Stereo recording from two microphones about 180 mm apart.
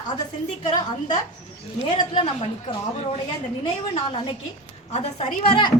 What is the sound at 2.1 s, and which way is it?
Speech, 30° left (ahead or behind).